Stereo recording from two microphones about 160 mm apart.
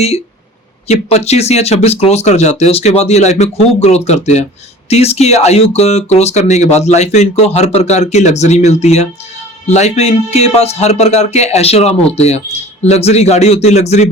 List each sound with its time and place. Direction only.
0.9 s a man's voice: 40° left (ahead or behind)